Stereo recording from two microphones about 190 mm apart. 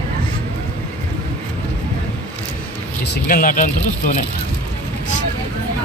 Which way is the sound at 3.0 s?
50° left (ahead or behind).